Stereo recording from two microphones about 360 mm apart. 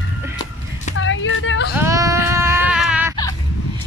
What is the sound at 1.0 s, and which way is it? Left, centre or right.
Speech, left.